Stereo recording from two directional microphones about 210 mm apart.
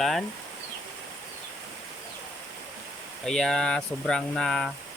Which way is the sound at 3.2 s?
Centre (ahead or behind).